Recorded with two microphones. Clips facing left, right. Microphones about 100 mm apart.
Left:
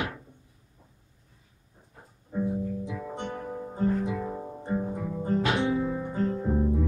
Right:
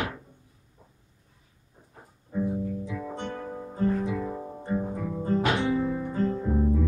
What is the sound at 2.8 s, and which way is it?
Guitar, 15° left (ahead or behind).